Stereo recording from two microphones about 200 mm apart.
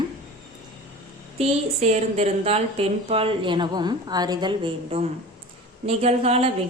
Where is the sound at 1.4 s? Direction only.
35° right (ahead or behind).